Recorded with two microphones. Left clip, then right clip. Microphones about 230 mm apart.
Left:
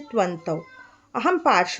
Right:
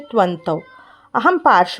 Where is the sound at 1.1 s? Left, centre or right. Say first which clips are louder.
Right 7 dB; centre.